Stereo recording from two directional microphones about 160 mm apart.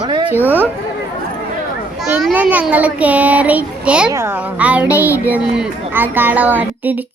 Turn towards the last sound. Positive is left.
turn(degrees=-10)  # may be behind; listen again after turning